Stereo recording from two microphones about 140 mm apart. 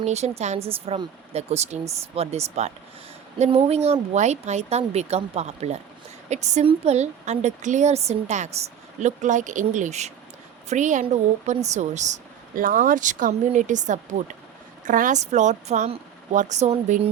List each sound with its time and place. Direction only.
0.0 s a woman's voice: 50° right (ahead or behind)